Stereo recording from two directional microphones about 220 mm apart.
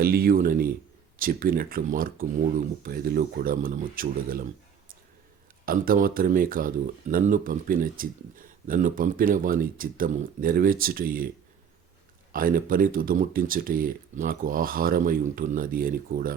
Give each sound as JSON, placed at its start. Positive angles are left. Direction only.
{"t": 0.0, "sound": "speech", "side_deg": -40}
{"t": 5.6, "sound": "speech", "side_deg": -40}
{"t": 12.3, "sound": "speech", "side_deg": -40}